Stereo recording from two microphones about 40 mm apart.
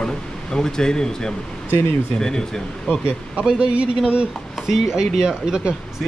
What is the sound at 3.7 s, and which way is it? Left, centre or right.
Speech, right.